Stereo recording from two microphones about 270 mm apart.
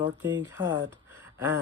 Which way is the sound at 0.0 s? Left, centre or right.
Centre.